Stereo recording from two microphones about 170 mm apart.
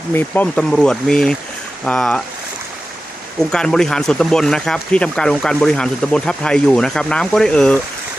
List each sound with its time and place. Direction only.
0.1 s speech: 10° left (ahead or behind)
3.5 s speech: 5° left (ahead or behind)